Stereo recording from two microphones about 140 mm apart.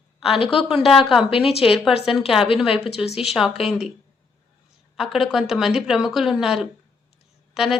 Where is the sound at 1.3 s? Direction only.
40° left (ahead or behind).